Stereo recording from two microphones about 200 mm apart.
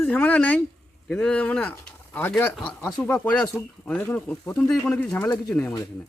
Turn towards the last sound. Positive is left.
turn(degrees=5)  # may be behind; listen again after turning